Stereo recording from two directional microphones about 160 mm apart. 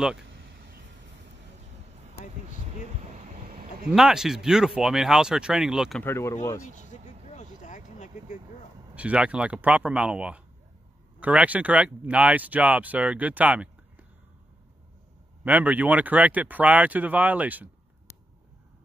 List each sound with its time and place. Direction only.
3.2 s a sound: 45° right (ahead or behind)
3.9 s speech: 5° right (ahead or behind)
6.0 s speech: 15° left (ahead or behind)
7.6 s a sound: 50° left (ahead or behind)
8.9 s speech: 10° right (ahead or behind)
15.4 s speech: 10° right (ahead or behind)